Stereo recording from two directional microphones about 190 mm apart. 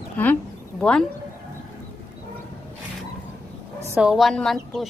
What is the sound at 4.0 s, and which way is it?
Speech, centre (ahead or behind).